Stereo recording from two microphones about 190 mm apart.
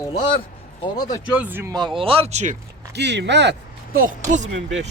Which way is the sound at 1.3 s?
10° right (ahead or behind).